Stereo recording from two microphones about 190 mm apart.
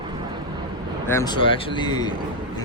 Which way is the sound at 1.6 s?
25° left (ahead or behind).